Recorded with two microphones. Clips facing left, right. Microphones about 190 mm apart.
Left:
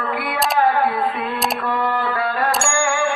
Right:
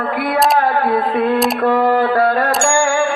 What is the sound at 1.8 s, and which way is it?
Mantra, 50° right (ahead or behind).